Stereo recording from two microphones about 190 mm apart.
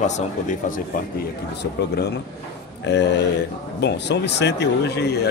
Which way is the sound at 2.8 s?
65° left (ahead or behind).